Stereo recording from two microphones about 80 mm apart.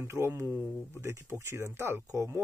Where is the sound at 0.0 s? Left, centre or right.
Right.